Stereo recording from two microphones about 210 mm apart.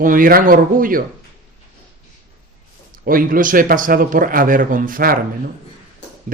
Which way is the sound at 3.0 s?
40° right (ahead or behind).